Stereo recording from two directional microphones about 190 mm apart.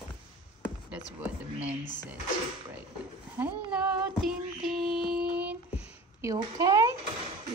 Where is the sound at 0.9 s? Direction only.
5° right (ahead or behind).